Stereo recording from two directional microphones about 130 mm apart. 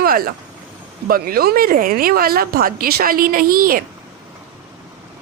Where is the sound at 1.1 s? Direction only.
90° right.